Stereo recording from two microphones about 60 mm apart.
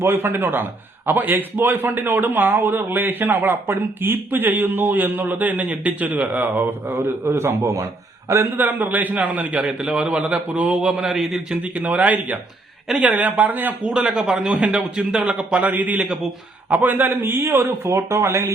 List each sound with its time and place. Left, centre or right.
0.0 s a man's voice: right
8.5 s speech: right
9.6 s a man's voice: centre
11.6 s speech: right
13.9 s a man's voice: centre; by 18.5 s right